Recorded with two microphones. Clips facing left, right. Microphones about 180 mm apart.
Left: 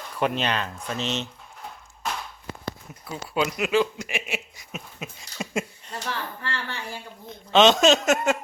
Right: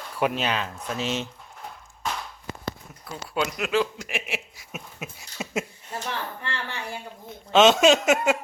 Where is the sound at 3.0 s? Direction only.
Centre (ahead or behind).